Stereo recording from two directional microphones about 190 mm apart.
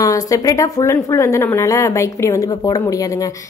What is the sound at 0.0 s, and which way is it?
A woman's voice, 20° left (ahead or behind).